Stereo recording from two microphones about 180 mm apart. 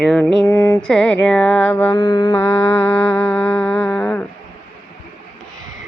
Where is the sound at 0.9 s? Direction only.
5° left (ahead or behind); by 2.3 s 20° left (ahead or behind).